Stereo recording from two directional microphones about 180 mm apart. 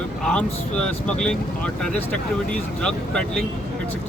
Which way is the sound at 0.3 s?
5° left (ahead or behind).